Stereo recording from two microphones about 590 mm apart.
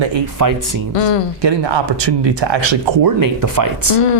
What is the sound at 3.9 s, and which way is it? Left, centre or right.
Speech, left.